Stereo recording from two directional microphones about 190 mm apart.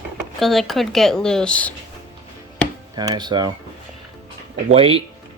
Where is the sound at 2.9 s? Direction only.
20° right (ahead or behind).